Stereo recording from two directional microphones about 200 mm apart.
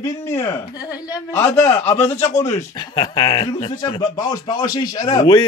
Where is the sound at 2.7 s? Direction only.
20° left (ahead or behind).